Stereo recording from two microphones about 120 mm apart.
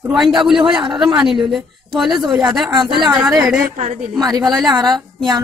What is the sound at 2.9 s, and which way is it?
A woman's voice, 5° right (ahead or behind).